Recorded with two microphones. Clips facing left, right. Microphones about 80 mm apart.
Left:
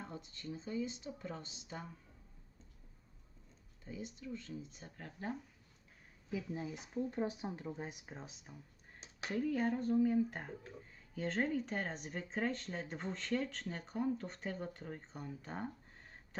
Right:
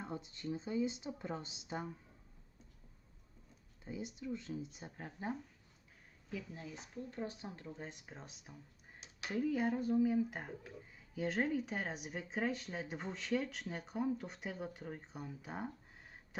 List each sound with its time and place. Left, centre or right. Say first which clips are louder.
0.0 s a woman's voice: right 4 dB; centre
3.8 s speech: right 3 dB; centre
6.3 s speech: left 5 dB; centre